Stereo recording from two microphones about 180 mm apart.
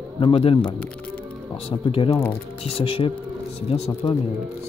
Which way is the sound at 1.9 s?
30° left (ahead or behind).